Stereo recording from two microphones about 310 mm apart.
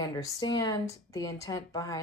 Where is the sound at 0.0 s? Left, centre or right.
Centre.